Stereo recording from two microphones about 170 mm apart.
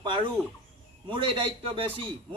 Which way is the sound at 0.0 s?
30° right (ahead or behind).